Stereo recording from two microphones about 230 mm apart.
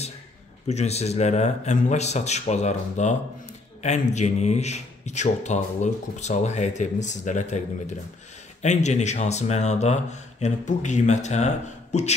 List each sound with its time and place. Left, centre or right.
0.7 s a man's voice: left